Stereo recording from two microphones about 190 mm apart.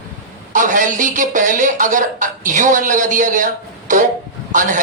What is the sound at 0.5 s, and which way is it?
Speech, 40° right (ahead or behind).